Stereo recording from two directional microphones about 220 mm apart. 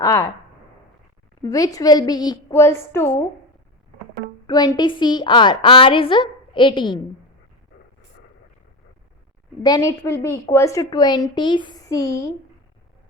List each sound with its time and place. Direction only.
0.0 s a sound: 15° left (ahead or behind)
1.4 s a woman's voice: 15° left (ahead or behind)
4.4 s a woman's voice: 20° left (ahead or behind)
9.6 s a woman's voice: 15° left (ahead or behind)